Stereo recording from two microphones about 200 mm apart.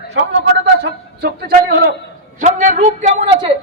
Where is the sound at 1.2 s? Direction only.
50° right (ahead or behind).